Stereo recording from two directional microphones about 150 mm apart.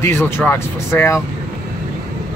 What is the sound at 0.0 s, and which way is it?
Speech, 15° left (ahead or behind).